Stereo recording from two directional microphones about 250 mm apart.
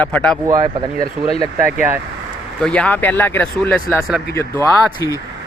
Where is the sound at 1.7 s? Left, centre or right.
Centre.